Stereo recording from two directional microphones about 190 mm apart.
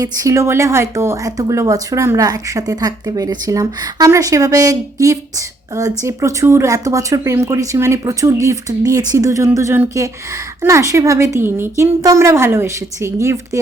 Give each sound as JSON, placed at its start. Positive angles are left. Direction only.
{"t": 0.0, "sound": "speech", "side_deg": -15}